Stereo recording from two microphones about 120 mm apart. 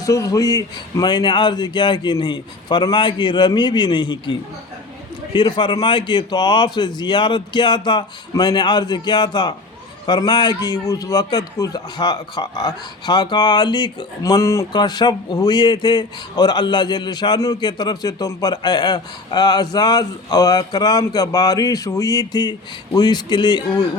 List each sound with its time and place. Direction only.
0.0 s a man's voice: 30° left (ahead or behind)
14.7 s a man's voice: 35° left (ahead or behind)